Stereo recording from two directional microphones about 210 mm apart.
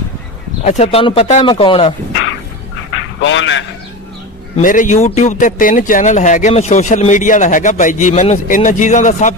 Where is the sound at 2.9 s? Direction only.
60° left (ahead or behind).